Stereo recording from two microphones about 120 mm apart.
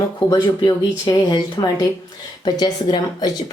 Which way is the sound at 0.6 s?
35° left (ahead or behind).